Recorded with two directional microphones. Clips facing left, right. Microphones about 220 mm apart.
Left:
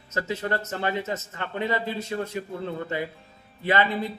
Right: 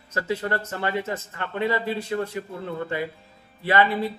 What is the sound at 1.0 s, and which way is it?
Speech, 20° left (ahead or behind).